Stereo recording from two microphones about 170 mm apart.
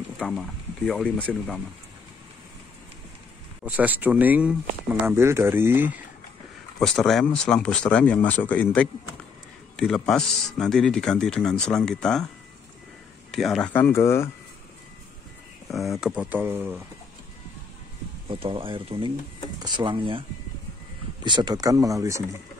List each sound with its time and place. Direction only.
0.2 s speech: 5° left (ahead or behind)
3.6 s speech: 10° right (ahead or behind)
6.8 s speech: centre (ahead or behind)
13.3 s speech: centre (ahead or behind)
13.7 s speech: 15° left (ahead or behind)
15.7 s speech: centre (ahead or behind)
18.3 s speech: 30° right (ahead or behind)